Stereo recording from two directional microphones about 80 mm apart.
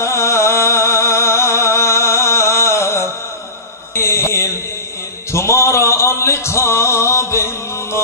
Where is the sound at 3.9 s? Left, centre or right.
Left.